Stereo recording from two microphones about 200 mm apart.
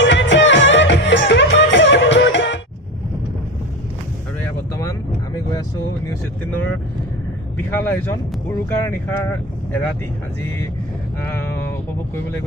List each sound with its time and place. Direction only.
0.0 s music: 65° left (ahead or behind)
7.5 s speech: 10° left (ahead or behind)